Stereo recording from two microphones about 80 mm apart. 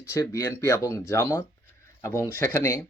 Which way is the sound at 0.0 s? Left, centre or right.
Left.